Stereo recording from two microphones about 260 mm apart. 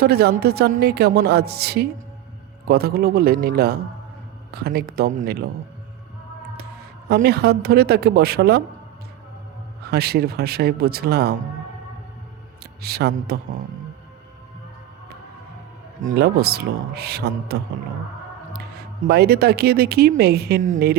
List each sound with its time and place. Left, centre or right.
0.0 s a woman's voice: right
7.1 s a woman's voice: right
9.9 s a woman's voice: right
12.8 s a woman's voice: right
16.0 s a woman's voice: right
19.0 s a woman's voice: right